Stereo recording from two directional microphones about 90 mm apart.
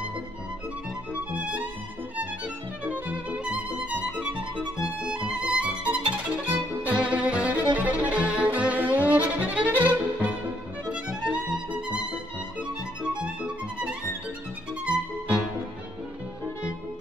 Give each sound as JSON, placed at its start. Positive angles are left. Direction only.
{"t": 1.3, "sound": "music", "side_deg": -20}
{"t": 2.8, "sound": "music", "side_deg": -15}
{"t": 7.7, "sound": "violin", "side_deg": -15}
{"t": 13.0, "sound": "music", "side_deg": -10}